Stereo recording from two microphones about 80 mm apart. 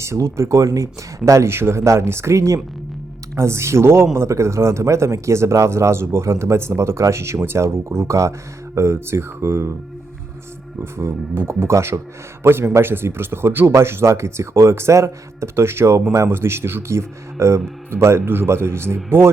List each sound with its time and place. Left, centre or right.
0.0 s a man's voice: right
10.9 s a man's voice: right